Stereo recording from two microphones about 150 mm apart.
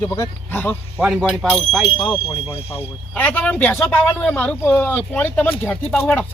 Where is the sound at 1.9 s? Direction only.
30° left (ahead or behind).